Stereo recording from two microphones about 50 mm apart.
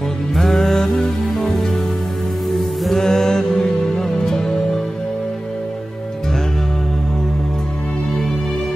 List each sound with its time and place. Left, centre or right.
0.4 s music: centre
2.8 s music: centre